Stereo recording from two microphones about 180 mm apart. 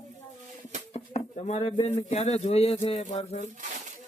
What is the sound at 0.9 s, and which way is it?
Speech, 35° left (ahead or behind).